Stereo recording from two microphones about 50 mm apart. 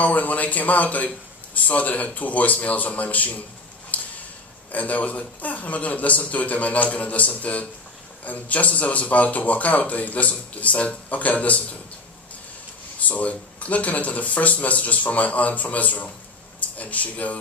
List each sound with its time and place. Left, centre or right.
0.0 s a man's voice: left
3.9 s a sound: left
4.7 s a man's voice: left
13.1 s speech: left